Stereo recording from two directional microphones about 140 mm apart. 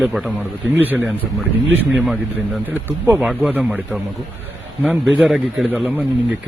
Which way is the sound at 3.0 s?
15° right (ahead or behind).